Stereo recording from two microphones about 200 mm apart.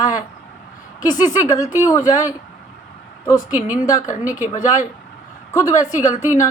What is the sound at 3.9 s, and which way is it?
Speech, 15° left (ahead or behind).